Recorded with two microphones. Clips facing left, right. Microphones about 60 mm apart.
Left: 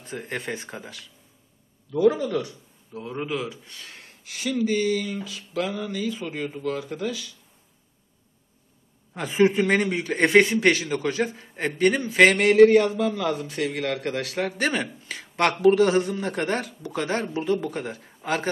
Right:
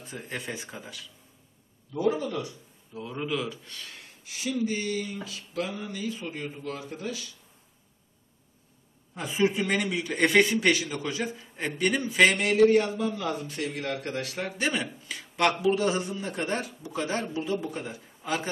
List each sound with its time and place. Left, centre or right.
0.3 s speech: left
2.0 s a man's voice: left
3.0 s a man's voice: left
4.2 s a sound: left
9.1 s a man's voice: left
12.5 s a man's voice: left
13.6 s a sound: left
14.0 s a man's voice: left
14.7 s speech: left
15.6 s speech: left
17.3 s speech: left